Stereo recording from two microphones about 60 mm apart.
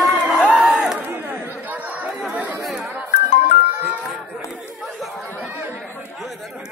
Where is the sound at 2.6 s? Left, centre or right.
Centre.